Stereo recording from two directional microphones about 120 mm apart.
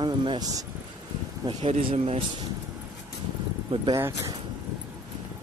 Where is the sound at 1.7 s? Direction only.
55° right (ahead or behind).